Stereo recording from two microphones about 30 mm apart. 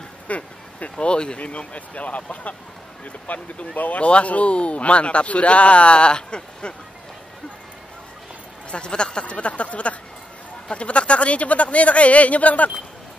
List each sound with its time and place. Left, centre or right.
0.3 s speech: left
0.9 s speech: left
1.4 s speech: left
3.7 s speech: left
4.1 s speech: left
8.7 s speech: left
9.2 s speech: left